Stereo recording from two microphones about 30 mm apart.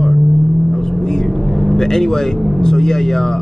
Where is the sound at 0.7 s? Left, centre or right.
Left.